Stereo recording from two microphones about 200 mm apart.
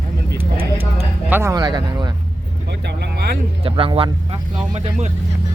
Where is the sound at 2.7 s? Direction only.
60° right (ahead or behind).